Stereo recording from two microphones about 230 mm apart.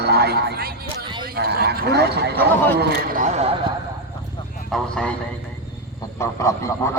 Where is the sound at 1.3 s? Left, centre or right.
Right.